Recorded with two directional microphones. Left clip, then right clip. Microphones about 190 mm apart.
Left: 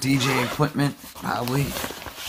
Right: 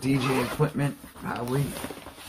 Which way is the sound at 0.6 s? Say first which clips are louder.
Left 4 dB; 60° left (ahead or behind).